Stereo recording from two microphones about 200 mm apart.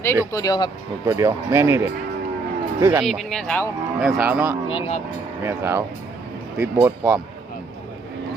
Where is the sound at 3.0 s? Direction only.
Centre (ahead or behind).